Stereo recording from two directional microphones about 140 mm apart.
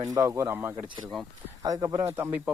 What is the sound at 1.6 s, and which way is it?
Speech, 25° right (ahead or behind).